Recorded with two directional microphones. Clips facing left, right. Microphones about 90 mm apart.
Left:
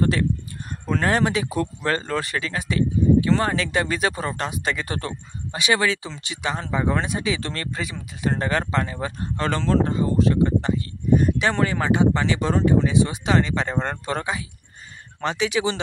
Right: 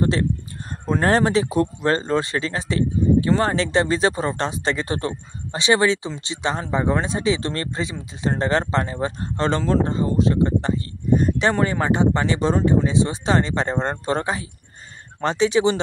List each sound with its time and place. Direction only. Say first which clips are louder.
0.0 s speech: right 1 dB; 25° right (ahead or behind)